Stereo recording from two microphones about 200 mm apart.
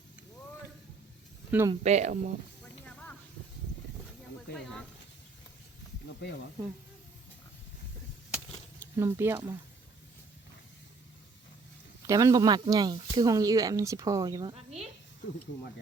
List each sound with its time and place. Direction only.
1.5 s speech: 10° right (ahead or behind)
1.7 s speech: 35° right (ahead or behind)
2.8 s snake: 5° left (ahead or behind)
9.0 s speech: 10° right (ahead or behind)
12.0 s speech: 15° right (ahead or behind)
14.5 s a woman's voice: 30° right (ahead or behind)